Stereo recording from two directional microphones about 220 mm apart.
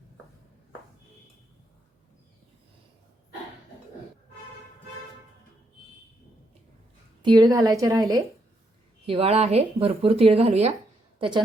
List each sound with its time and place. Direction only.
7.2 s a woman's voice: 20° right (ahead or behind)